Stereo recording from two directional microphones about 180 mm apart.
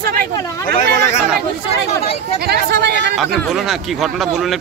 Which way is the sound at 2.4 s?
65° right (ahead or behind).